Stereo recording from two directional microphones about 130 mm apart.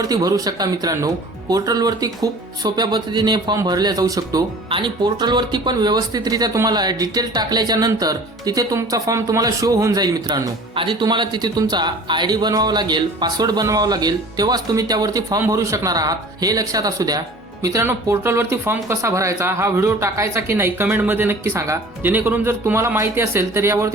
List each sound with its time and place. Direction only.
0.0 s speech: 30° right (ahead or behind)